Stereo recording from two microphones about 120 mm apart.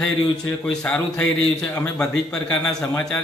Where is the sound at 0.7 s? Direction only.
10° left (ahead or behind).